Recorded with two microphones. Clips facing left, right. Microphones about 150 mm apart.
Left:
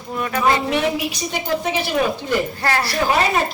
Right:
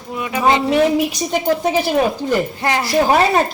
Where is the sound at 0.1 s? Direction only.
10° right (ahead or behind).